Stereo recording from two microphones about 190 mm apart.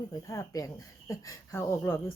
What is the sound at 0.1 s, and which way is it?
Speech, 15° left (ahead or behind).